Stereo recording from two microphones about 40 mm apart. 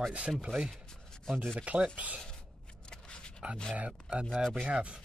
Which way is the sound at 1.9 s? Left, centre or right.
Right.